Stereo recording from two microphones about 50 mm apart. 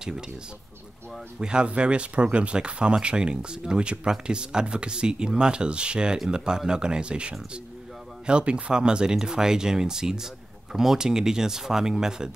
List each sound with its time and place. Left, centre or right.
1.4 s speech: centre